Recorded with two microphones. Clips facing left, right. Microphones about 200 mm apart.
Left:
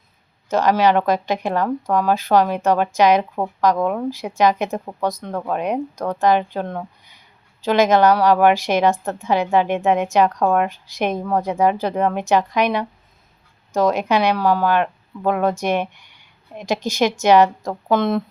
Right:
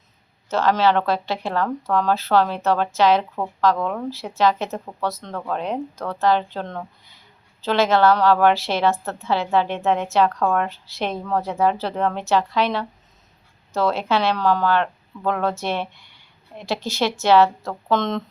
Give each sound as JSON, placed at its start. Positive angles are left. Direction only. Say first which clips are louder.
{"t": 0.4, "sound": "speech", "louder": "left 2 dB", "side_deg": 15}